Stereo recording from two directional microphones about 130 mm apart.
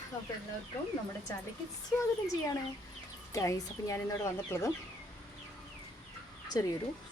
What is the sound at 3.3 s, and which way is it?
Speech, 25° left (ahead or behind).